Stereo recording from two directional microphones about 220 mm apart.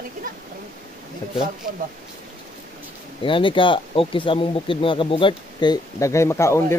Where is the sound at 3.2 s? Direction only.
25° left (ahead or behind).